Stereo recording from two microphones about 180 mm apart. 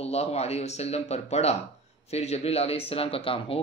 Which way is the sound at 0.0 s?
35° left (ahead or behind).